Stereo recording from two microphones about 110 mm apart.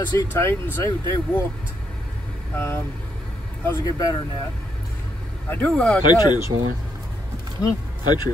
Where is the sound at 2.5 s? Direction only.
20° left (ahead or behind).